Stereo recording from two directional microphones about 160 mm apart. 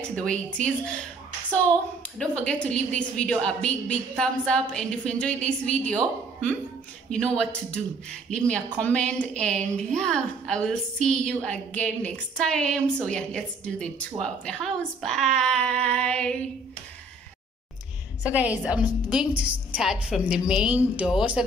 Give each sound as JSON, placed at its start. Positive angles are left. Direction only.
{"t": 0.1, "sound": "a woman's voice", "side_deg": 5}
{"t": 2.1, "sound": "a woman's voice", "side_deg": 5}
{"t": 7.1, "sound": "a woman's voice", "side_deg": 5}
{"t": 18.2, "sound": "a woman's voice", "side_deg": -10}